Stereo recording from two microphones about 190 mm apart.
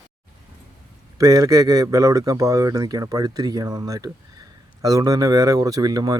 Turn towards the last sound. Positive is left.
turn(degrees=-20)  # may be behind; listen again after turning